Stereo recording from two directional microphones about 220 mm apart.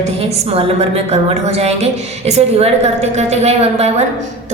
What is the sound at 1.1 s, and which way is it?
A woman's voice, 30° right (ahead or behind).